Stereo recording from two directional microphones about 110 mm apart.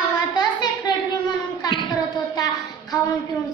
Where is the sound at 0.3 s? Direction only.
40° left (ahead or behind).